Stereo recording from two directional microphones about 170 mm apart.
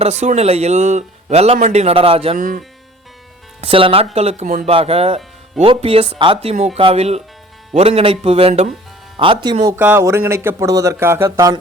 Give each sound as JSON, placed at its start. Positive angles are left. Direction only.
{"t": 0.0, "sound": "speech", "side_deg": -40}
{"t": 2.4, "sound": "speech", "side_deg": -55}
{"t": 3.6, "sound": "speech", "side_deg": -30}
{"t": 9.7, "sound": "speech", "side_deg": -10}